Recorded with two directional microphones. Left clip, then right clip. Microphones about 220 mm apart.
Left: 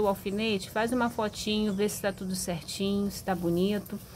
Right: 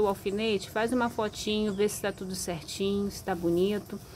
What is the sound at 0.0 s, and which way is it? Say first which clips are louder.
Speech: right 1 dB; centre (ahead or behind).